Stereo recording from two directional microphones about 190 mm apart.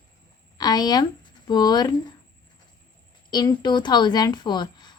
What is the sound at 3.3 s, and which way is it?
A woman's voice, 20° left (ahead or behind).